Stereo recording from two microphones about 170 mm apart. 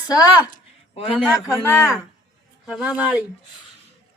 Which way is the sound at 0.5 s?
35° left (ahead or behind).